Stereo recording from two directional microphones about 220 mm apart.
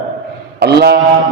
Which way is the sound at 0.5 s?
45° right (ahead or behind).